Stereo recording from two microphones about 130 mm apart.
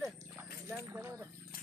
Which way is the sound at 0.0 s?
10° right (ahead or behind).